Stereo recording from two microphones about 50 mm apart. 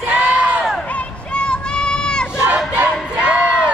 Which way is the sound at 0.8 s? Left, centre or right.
Left.